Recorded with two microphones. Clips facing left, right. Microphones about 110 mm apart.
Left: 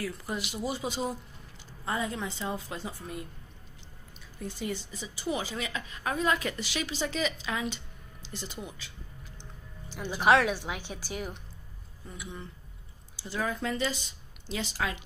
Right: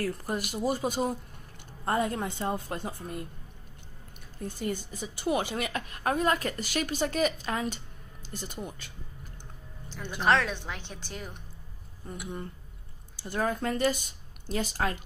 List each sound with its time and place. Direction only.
0.0 s a woman's voice: 45° right (ahead or behind)
4.5 s a woman's voice: 50° right (ahead or behind)
8.6 s music: 50° right (ahead or behind)
9.8 s speech: 10° left (ahead or behind)
12.1 s a woman's voice: 45° right (ahead or behind)